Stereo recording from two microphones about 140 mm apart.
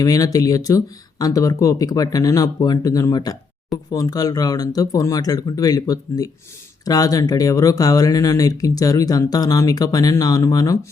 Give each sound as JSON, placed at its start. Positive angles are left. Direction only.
{"t": 0.0, "sound": "speech", "side_deg": 25}